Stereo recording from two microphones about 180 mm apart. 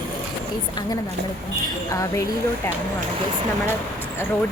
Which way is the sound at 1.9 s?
15° left (ahead or behind).